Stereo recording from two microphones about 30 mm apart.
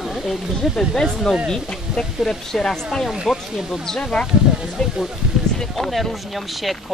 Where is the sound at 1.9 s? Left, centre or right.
Right.